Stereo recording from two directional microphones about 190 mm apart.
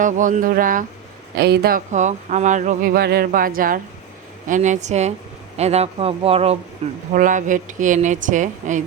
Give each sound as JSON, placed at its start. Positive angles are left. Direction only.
{"t": 0.0, "sound": "speech", "side_deg": -45}
{"t": 7.1, "sound": "speech", "side_deg": -45}